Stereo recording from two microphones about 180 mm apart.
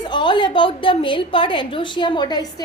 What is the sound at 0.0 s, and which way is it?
A woman's voice, 25° left (ahead or behind).